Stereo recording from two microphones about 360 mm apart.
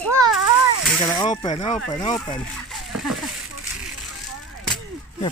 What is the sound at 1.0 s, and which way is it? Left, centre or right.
Speech, centre.